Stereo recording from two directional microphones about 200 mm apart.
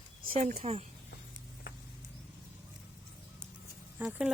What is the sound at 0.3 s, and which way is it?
Speech, 30° right (ahead or behind).